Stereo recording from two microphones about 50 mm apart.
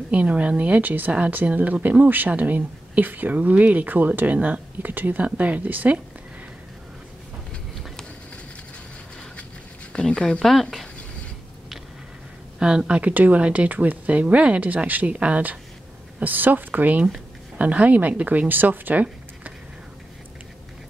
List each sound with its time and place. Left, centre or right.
0.1 s speech: right
10.0 s speech: centre
12.5 s speech: centre
13.0 s speech: right
16.2 s speech: right